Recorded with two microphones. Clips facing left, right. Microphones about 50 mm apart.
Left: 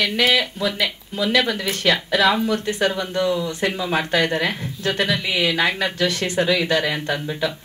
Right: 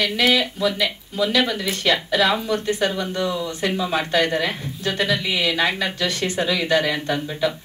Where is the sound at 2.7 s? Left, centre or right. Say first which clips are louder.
Left 1 dB; left.